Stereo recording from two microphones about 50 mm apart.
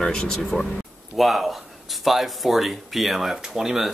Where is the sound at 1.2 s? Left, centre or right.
Centre.